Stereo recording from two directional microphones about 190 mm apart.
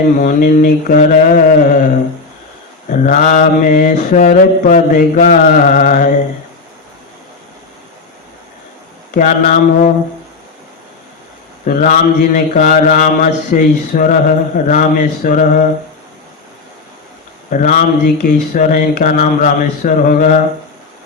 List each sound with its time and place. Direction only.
0.0 s mantra: 45° left (ahead or behind)
2.9 s mantra: 40° left (ahead or behind)
9.1 s mantra: 40° left (ahead or behind)
11.6 s mantra: 45° left (ahead or behind)
17.5 s mantra: 40° left (ahead or behind)